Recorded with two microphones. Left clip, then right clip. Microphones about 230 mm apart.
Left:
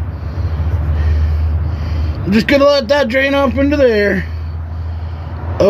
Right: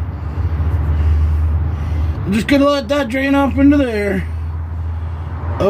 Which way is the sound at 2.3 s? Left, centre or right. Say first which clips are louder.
Left 4 dB; left.